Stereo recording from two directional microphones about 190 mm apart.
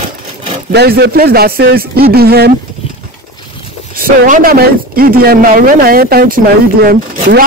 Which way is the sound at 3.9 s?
50° right (ahead or behind).